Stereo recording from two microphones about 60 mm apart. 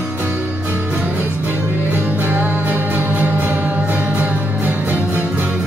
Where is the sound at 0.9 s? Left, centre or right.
Right.